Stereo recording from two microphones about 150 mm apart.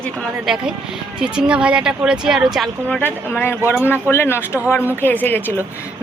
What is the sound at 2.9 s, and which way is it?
Speech, 10° left (ahead or behind).